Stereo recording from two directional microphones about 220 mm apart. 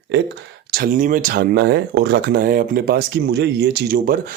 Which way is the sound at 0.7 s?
40° right (ahead or behind).